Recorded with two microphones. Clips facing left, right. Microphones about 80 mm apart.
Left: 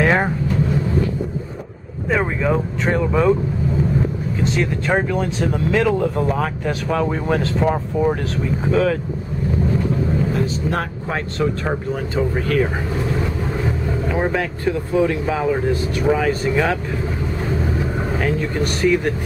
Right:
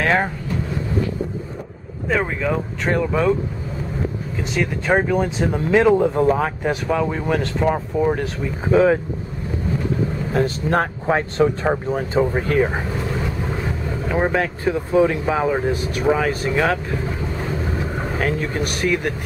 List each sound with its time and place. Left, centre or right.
0.0 s speech: centre
2.0 s speech: centre
4.6 s speech: centre
6.9 s speech: centre
8.7 s speech: right
10.3 s speech: right
11.1 s speech: right
14.3 s speech: centre
18.2 s speech: centre